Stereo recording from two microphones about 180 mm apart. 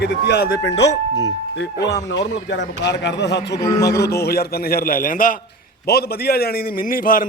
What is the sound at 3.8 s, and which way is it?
A man's voice, 65° left (ahead or behind).